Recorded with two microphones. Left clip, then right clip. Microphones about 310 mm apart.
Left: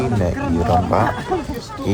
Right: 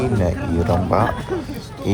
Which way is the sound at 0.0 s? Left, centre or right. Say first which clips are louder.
Left 1 dB; centre.